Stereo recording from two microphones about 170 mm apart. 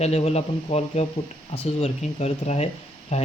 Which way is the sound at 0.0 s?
40° left (ahead or behind).